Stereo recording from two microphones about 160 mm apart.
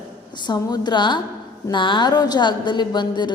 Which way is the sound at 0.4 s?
25° left (ahead or behind).